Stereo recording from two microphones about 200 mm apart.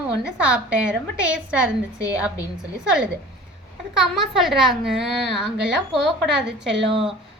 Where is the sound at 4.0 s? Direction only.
Centre (ahead or behind).